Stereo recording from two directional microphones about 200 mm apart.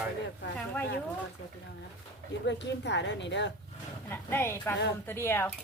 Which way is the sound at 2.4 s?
60° left (ahead or behind).